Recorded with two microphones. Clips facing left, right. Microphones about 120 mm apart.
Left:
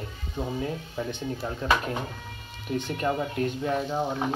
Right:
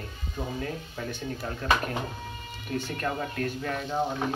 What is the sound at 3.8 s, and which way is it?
Speech, 5° left (ahead or behind).